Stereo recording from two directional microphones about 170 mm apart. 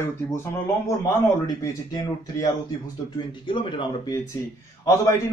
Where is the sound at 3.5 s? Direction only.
30° left (ahead or behind).